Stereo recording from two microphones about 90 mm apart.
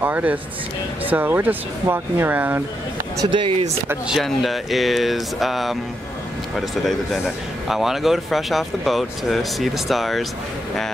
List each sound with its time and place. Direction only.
0.0 s speech: 20° right (ahead or behind)
3.3 s speech: 70° right (ahead or behind)
4.1 s a man's voice: centre (ahead or behind)